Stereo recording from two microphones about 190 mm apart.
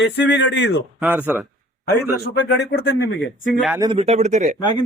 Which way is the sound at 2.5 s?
65° left (ahead or behind).